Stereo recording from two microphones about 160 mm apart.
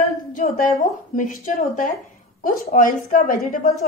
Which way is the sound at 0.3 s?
55° left (ahead or behind).